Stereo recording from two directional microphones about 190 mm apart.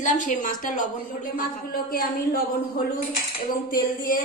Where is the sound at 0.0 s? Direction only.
45° left (ahead or behind).